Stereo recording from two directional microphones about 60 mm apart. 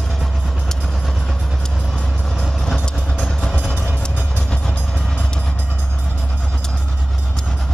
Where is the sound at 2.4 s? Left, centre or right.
Centre.